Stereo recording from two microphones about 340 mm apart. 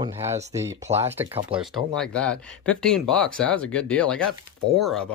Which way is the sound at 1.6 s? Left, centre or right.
Centre.